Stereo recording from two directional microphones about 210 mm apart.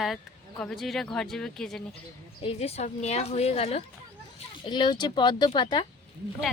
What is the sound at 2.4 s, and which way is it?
A woman's voice, 30° left (ahead or behind).